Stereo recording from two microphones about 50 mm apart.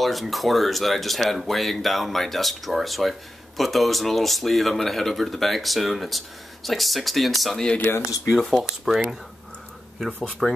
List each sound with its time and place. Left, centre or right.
0.0 s speech: centre
7.9 s speech: left
8.5 s speech: centre
10.4 s speech: centre